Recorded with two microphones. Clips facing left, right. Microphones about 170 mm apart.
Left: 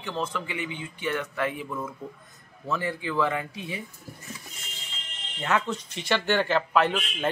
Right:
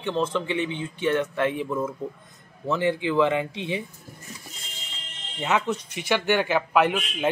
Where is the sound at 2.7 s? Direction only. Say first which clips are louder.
Right 6 dB; 25° right (ahead or behind).